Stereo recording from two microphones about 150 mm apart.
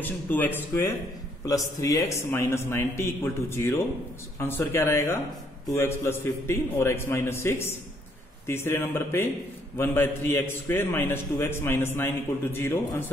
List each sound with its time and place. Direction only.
0.0 s a man's voice: 10° left (ahead or behind)
1.4 s a man's voice: 20° left (ahead or behind)